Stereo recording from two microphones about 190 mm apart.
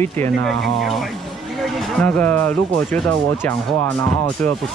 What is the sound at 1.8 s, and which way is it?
Speech, 10° left (ahead or behind).